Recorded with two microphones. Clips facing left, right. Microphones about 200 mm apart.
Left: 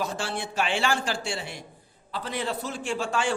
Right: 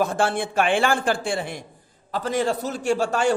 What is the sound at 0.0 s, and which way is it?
A man's voice, 55° right (ahead or behind).